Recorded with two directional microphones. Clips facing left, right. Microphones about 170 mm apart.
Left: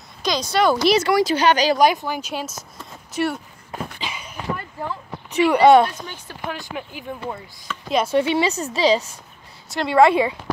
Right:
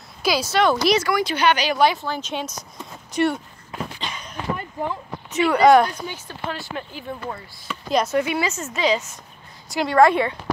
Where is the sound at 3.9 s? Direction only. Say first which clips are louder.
Even; 5° left (ahead or behind).